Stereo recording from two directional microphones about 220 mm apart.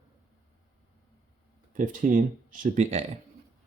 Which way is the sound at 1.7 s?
35° right (ahead or behind).